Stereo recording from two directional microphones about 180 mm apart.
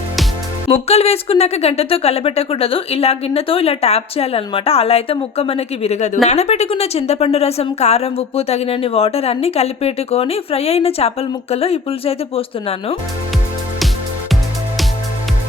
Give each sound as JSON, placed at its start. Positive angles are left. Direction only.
{"t": 0.7, "sound": "a woman's voice", "side_deg": 35}